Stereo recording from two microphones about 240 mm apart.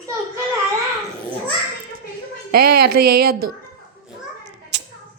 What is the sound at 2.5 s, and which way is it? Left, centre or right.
Speech, right.